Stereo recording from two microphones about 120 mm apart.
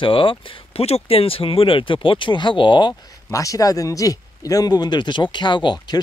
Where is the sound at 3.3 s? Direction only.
30° left (ahead or behind).